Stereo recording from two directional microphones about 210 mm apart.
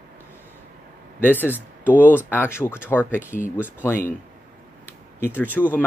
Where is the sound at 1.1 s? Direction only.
10° left (ahead or behind).